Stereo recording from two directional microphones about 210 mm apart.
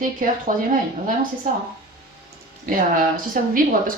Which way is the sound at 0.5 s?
40° right (ahead or behind).